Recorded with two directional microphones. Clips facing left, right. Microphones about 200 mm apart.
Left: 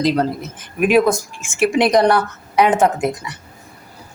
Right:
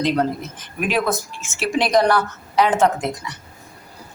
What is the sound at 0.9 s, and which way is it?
Speech, 15° left (ahead or behind).